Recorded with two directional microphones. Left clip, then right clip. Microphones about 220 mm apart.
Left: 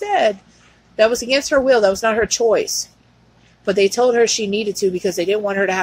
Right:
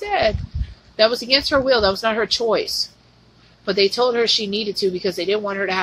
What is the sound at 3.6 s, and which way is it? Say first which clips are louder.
Speech: left 3 dB; 15° left (ahead or behind).